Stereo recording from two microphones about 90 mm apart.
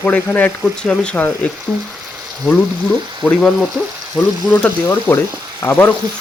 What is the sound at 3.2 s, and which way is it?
Speech, centre (ahead or behind).